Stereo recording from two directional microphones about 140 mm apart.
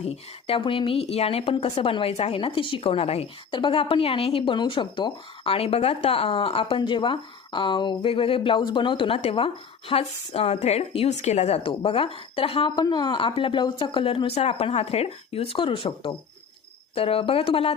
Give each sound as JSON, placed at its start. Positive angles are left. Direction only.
{"t": 0.0, "sound": "a woman's voice", "side_deg": 45}